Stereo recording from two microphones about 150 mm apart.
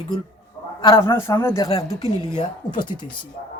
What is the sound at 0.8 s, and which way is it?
Speech, 30° left (ahead or behind).